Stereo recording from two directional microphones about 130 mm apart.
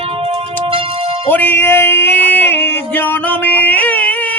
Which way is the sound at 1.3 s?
15° left (ahead or behind).